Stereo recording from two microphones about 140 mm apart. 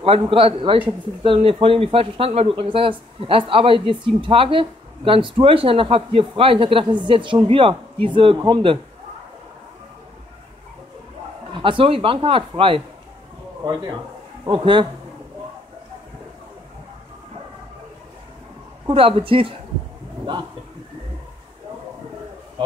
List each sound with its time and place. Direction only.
0.0 s speech: 40° right (ahead or behind)
11.5 s speech: 35° right (ahead or behind)
14.4 s speech: 35° right (ahead or behind)
18.9 s speech: 40° right (ahead or behind)